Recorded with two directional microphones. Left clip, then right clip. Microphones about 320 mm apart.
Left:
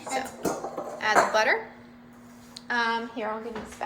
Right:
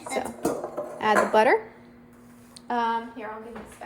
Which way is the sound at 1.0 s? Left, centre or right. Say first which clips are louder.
Right 2 dB; centre.